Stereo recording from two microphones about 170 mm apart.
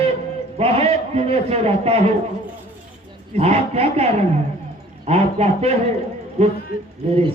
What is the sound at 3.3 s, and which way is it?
A man's voice, 35° right (ahead or behind).